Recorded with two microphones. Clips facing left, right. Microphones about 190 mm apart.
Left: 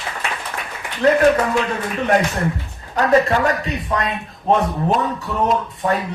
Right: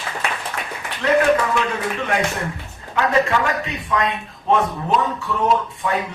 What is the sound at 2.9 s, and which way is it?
A man's voice, 40° left (ahead or behind).